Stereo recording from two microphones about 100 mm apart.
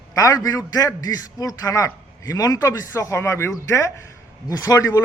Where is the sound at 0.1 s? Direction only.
35° left (ahead or behind).